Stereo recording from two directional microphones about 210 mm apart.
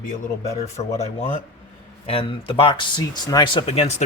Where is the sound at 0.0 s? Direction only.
35° left (ahead or behind).